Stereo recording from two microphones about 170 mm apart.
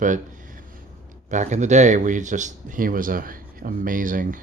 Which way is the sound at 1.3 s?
45° right (ahead or behind).